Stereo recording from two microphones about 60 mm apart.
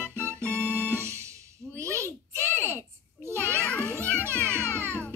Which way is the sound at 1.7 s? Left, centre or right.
Right.